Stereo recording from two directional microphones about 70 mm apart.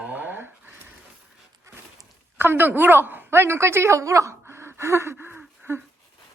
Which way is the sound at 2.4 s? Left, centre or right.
Right.